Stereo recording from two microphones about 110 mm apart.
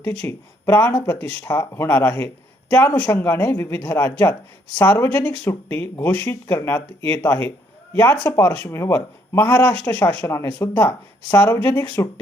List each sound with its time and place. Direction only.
0.0 s speech: 15° left (ahead or behind)